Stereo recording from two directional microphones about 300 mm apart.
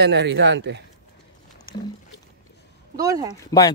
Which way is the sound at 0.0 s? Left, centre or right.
Right.